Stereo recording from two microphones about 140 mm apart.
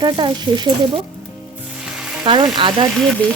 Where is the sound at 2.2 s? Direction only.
35° right (ahead or behind).